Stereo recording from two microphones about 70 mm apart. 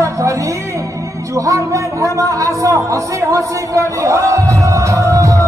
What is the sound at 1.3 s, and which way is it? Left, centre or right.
Speech, right.